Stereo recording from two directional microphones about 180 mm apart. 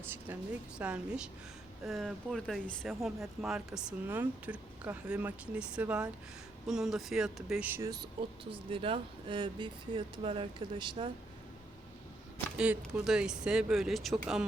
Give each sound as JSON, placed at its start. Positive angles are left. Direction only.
{"t": 0.8, "sound": "speech", "side_deg": -5}
{"t": 12.5, "sound": "speech", "side_deg": -5}